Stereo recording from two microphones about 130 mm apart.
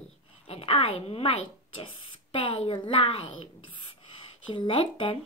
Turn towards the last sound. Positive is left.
turn(degrees=45)  # may be behind; listen again after turning